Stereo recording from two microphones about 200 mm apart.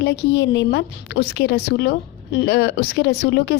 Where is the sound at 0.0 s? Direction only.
60° left (ahead or behind).